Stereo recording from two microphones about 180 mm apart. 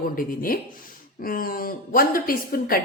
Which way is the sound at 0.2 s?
50° left (ahead or behind).